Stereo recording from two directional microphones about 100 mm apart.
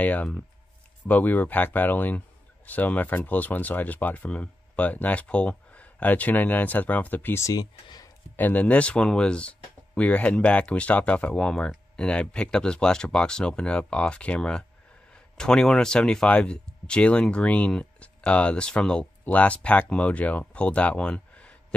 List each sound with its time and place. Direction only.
0.0 s speech: 15° left (ahead or behind)
7.4 s speech: 40° left (ahead or behind)
8.4 s speech: 15° left (ahead or behind)